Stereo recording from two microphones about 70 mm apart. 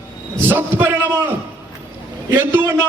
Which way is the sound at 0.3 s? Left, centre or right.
Right.